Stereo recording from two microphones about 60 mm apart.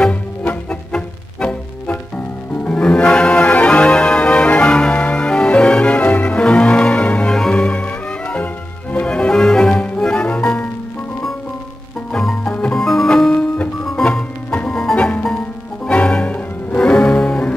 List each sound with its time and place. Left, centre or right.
0.0 s music: centre
12.1 s music: centre
15.0 s music: centre